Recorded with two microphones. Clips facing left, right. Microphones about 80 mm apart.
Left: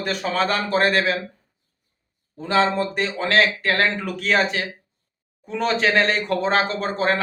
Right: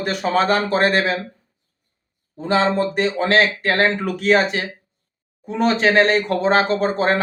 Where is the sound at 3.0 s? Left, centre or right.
Right.